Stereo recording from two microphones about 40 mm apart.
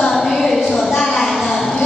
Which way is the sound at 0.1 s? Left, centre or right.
Centre.